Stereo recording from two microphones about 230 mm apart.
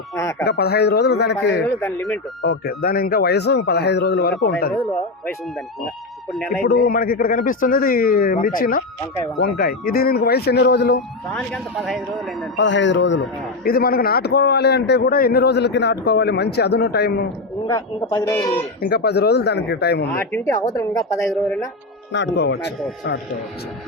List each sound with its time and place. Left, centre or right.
0.2 s speech: centre
0.4 s a man's voice: left
1.6 s speech: centre
2.4 s a man's voice: left
6.5 s a man's voice: left
11.3 s speech: centre
12.5 s a man's voice: left
13.7 s a man's voice: left
17.7 s speech: centre
18.9 s a man's voice: left
20.1 s speech: centre
22.1 s a man's voice: left